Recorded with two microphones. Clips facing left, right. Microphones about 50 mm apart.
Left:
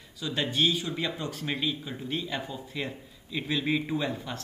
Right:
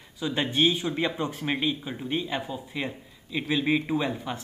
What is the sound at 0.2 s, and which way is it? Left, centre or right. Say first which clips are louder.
Speech: right 3 dB; right.